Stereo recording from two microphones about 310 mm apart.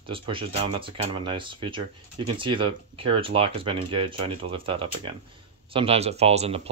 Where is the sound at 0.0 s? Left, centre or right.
Centre.